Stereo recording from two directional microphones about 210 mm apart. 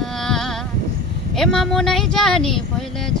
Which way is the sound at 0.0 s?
Centre (ahead or behind).